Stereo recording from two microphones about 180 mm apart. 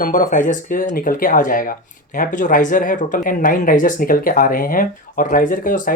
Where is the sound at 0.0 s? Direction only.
50° left (ahead or behind).